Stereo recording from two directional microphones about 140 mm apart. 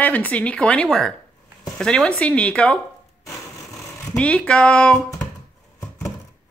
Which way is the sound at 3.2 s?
25° left (ahead or behind).